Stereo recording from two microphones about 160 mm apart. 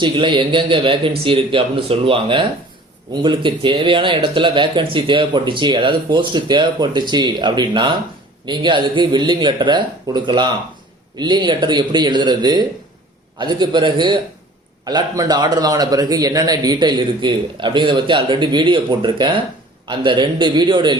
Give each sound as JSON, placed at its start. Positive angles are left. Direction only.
{"t": 0.0, "sound": "a man's voice", "side_deg": -30}